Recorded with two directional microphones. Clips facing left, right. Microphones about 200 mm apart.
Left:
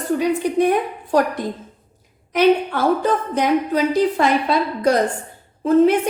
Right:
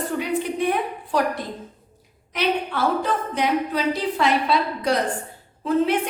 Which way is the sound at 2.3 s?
45° left (ahead or behind).